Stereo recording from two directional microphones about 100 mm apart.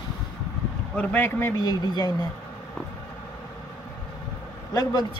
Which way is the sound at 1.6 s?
40° left (ahead or behind).